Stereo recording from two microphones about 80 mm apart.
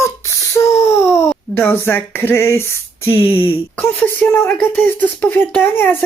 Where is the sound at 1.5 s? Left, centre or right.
Left.